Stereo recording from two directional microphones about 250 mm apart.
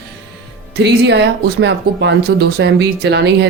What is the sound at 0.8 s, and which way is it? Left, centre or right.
Speech, right.